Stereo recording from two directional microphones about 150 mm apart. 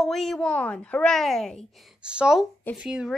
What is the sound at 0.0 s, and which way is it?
A woman's voice, centre (ahead or behind).